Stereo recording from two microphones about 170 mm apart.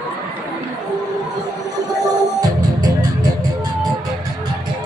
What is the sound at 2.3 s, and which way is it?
Music, 20° right (ahead or behind).